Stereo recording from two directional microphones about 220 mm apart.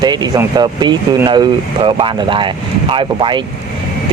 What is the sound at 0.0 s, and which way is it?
Speech, 20° right (ahead or behind).